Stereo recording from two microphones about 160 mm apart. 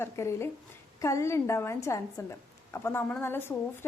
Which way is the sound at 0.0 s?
15° left (ahead or behind).